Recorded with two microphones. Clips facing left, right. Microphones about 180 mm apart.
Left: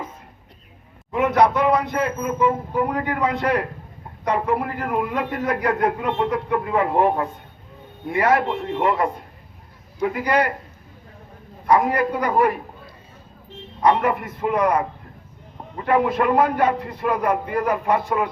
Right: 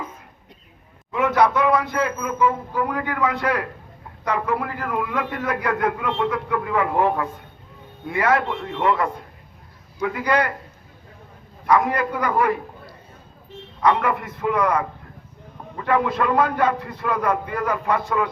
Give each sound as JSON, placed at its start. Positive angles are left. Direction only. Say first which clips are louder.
{"t": 1.2, "sound": "a man's voice", "louder": "left 1 dB", "side_deg": 20}
{"t": 11.8, "sound": "a man's voice", "louder": "left 2 dB", "side_deg": 20}
{"t": 13.8, "sound": "a man's voice", "louder": "left 1 dB", "side_deg": 25}